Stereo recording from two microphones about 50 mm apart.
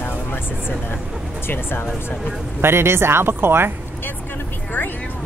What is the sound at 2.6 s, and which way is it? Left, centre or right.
Speech, right.